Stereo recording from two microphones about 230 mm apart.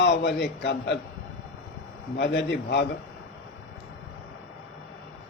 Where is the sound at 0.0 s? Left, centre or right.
Left.